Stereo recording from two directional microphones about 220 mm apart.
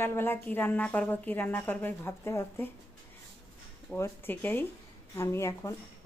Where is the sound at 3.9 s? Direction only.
10° left (ahead or behind).